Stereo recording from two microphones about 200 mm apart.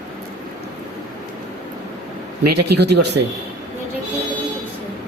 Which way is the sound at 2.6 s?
55° right (ahead or behind).